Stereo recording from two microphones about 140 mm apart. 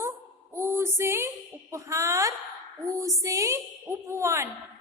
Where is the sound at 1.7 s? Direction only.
20° right (ahead or behind).